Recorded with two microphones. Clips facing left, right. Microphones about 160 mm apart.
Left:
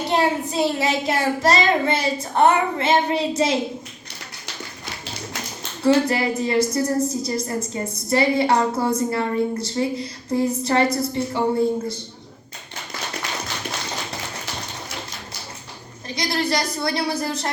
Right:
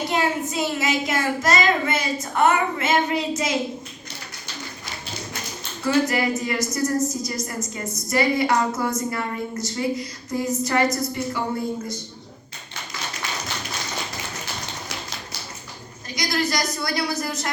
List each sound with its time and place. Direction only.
0.1 s child singing: 30° left (ahead or behind)
5.8 s a woman's voice: 30° left (ahead or behind)
16.0 s a woman's voice: 30° left (ahead or behind)